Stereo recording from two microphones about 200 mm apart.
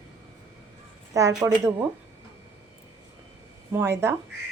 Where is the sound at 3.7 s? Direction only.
10° right (ahead or behind).